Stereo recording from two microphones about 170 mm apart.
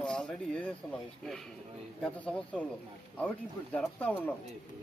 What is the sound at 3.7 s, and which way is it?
Speech, 10° left (ahead or behind).